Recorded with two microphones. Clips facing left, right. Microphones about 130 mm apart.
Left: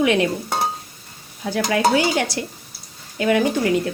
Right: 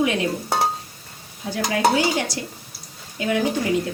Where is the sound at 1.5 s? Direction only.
65° left (ahead or behind).